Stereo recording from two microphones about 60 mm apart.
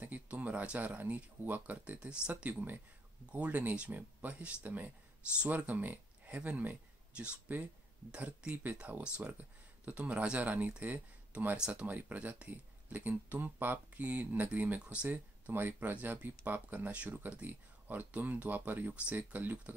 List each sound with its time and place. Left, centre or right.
0.0 s speech: right
2.0 s speech: centre
11.5 s speech: centre
15.1 s speech: right